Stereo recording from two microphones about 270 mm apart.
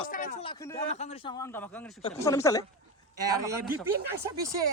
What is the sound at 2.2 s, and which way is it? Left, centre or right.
Speech, centre.